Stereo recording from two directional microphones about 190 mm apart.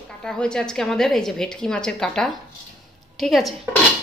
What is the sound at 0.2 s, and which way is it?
A woman's voice, 5° left (ahead or behind).